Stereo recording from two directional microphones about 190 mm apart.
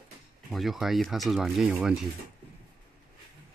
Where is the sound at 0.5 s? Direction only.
Centre (ahead or behind).